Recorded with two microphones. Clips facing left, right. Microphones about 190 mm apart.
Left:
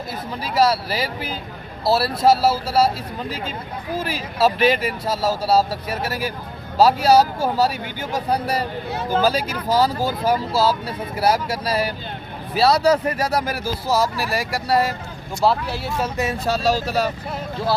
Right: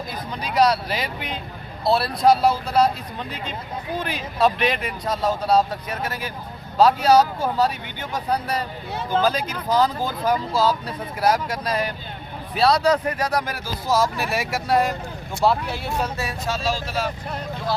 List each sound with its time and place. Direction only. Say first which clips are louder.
0.4 s speech: even; 5° left (ahead or behind)
16.5 s speech: left 5 dB; 40° left (ahead or behind)